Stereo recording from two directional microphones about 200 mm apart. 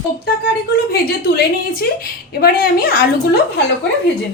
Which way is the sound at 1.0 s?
50° left (ahead or behind).